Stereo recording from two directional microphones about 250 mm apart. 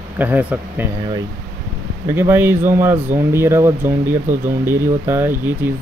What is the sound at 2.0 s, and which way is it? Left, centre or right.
Speech, centre.